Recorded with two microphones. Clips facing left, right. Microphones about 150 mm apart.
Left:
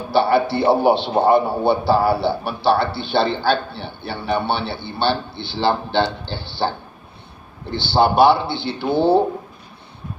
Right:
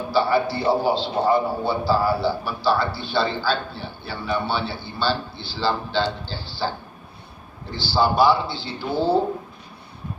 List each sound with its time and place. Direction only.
0.1 s a man's voice: 65° left (ahead or behind)